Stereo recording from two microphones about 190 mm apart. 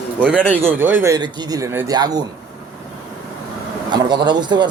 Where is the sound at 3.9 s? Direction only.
25° right (ahead or behind).